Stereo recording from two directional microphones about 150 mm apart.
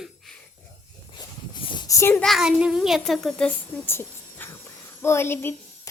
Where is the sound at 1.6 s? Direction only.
30° left (ahead or behind).